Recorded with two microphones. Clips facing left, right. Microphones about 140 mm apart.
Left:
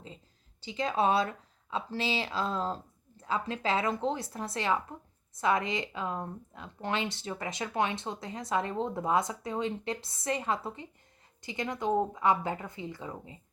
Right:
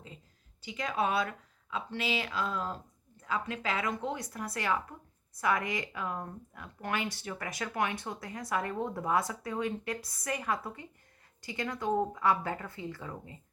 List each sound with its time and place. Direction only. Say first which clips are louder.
0.6 s speech: left 4 dB; 25° left (ahead or behind)